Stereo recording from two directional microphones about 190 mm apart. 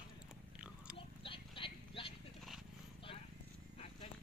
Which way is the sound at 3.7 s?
30° left (ahead or behind).